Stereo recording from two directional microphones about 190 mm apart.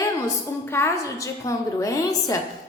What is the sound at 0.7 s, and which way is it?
A woman's voice, 15° left (ahead or behind).